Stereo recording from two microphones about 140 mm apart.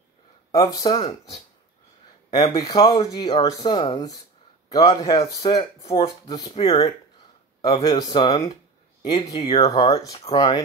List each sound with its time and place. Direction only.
0.5 s speech: 25° left (ahead or behind)
6.2 s speech: 30° left (ahead or behind)